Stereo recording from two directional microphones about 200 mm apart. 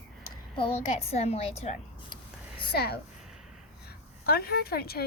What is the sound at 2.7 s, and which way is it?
A woman's voice, 50° left (ahead or behind).